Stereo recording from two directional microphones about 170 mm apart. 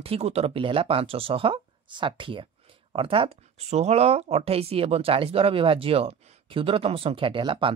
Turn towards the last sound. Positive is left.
turn(degrees=-30)  # may be behind; listen again after turning